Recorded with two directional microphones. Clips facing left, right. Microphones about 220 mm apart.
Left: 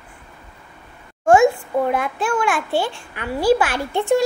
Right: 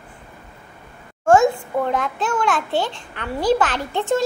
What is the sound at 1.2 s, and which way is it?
A child's voice, 15° left (ahead or behind).